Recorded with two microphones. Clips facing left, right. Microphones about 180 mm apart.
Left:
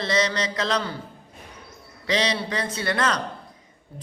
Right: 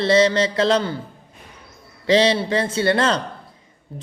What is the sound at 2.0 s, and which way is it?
A man's voice, 30° right (ahead or behind).